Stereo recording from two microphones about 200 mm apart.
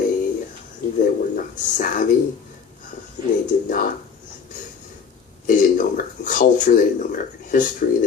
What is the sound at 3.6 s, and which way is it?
Speech, 45° left (ahead or behind).